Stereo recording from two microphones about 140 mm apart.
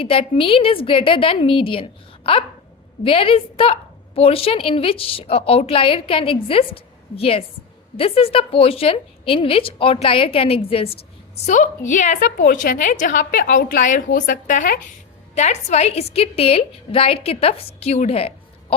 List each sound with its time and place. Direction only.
0.0 s a woman's voice: 40° left (ahead or behind)
11.3 s a woman's voice: 55° left (ahead or behind)
15.4 s a woman's voice: 50° left (ahead or behind)